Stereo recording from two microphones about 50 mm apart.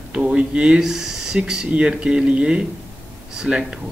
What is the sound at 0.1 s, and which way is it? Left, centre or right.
Speech, right.